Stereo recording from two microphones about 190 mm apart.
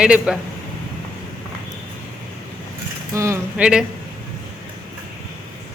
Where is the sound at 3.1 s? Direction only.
15° right (ahead or behind).